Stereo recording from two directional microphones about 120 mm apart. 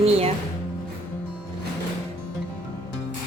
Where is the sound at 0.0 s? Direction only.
55° right (ahead or behind).